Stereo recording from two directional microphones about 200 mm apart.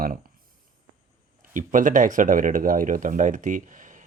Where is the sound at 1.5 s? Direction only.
40° right (ahead or behind).